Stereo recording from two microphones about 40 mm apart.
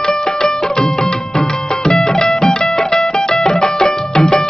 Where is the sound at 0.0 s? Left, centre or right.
Centre.